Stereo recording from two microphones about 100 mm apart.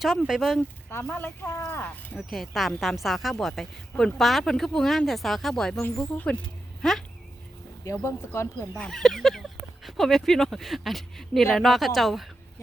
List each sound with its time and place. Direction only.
0.0 s speech: 5° right (ahead or behind)
1.1 s speech: 25° left (ahead or behind)
2.1 s speech: centre (ahead or behind)
5.8 s speech: 15° left (ahead or behind)
7.9 s speech: 30° left (ahead or behind)
8.7 s speech: 5° left (ahead or behind)